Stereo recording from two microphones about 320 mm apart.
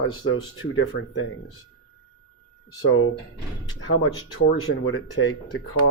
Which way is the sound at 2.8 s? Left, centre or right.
Left.